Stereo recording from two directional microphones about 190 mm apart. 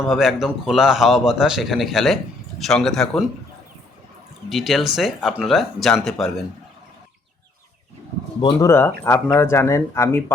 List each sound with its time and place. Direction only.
0.1 s a man's voice: centre (ahead or behind)
4.4 s a man's voice: centre (ahead or behind)
8.4 s speech: 25° left (ahead or behind)
9.0 s speech: 15° left (ahead or behind)